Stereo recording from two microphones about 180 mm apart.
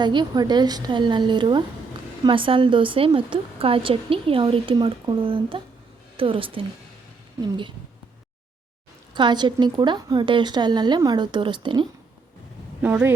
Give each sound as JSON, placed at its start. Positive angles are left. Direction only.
{"t": 0.0, "sound": "a woman's voice", "side_deg": -25}
{"t": 9.1, "sound": "a woman's voice", "side_deg": -25}
{"t": 12.8, "sound": "speech", "side_deg": -10}